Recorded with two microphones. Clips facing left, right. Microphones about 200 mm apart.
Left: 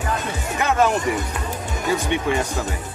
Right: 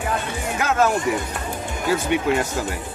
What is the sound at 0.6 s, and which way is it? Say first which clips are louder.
Music: left 1 dB; centre (ahead or behind).